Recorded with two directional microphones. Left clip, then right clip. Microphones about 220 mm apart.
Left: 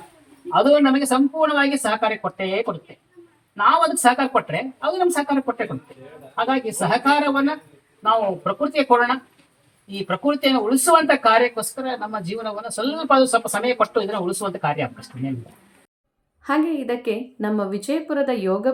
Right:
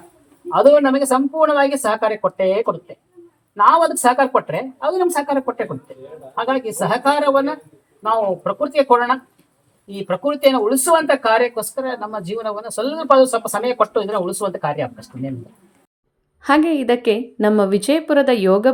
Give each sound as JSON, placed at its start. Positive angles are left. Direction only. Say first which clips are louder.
{"t": 0.5, "sound": "speech", "louder": "right 4 dB", "side_deg": -15}
{"t": 16.4, "sound": "a woman's voice", "louder": "right 6 dB", "side_deg": -40}